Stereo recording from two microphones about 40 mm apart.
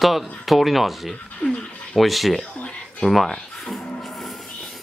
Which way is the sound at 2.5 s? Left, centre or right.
Left.